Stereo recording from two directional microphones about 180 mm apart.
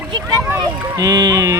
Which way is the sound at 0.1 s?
20° right (ahead or behind).